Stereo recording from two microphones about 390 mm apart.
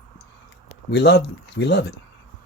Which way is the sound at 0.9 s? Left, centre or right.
Left.